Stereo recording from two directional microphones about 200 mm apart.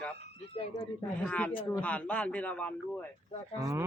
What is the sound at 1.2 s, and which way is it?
A man's voice, 5° left (ahead or behind).